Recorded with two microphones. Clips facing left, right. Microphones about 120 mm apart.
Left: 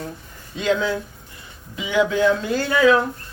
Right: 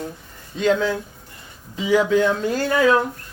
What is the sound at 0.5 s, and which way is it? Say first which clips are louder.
A man's voice: right 2 dB; 40° right (ahead or behind).